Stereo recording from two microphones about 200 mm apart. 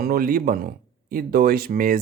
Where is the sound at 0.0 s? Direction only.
50° right (ahead or behind).